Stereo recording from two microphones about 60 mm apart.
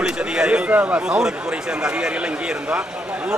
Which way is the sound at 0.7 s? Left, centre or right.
Right.